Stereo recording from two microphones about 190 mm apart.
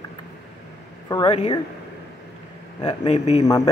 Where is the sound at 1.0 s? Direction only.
20° left (ahead or behind).